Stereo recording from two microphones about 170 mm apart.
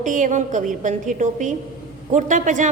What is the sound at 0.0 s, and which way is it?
A woman's voice, 50° right (ahead or behind).